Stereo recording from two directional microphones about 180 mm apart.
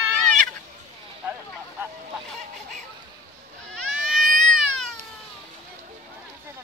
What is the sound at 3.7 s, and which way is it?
Cat, centre (ahead or behind).